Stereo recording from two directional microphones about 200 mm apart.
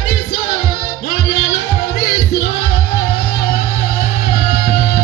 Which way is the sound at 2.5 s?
50° left (ahead or behind).